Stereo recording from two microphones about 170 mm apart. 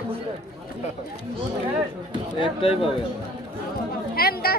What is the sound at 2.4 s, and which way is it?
Speech, 30° left (ahead or behind).